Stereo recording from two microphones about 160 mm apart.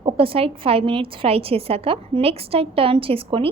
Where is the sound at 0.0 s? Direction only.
35° right (ahead or behind).